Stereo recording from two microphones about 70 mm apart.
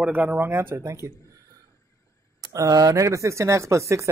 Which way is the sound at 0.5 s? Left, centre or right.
Right.